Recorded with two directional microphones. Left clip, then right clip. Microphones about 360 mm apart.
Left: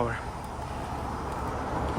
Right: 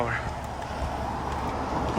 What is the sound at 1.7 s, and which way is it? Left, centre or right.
Vehicle, right.